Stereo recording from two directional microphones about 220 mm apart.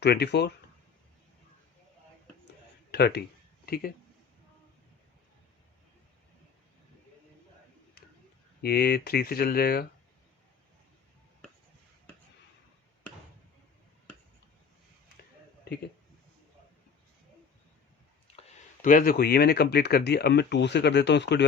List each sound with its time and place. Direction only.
0.0 s speech: 50° left (ahead or behind)
2.9 s speech: 50° left (ahead or behind)
8.6 s speech: 45° left (ahead or behind)
18.3 s speech: 35° left (ahead or behind)